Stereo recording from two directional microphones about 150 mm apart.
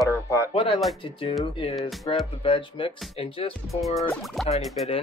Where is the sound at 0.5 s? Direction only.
35° left (ahead or behind).